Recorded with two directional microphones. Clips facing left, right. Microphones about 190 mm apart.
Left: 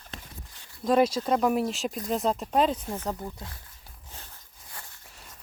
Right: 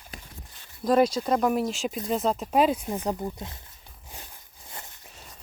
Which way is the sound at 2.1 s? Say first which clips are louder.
Right 1 dB; centre (ahead or behind).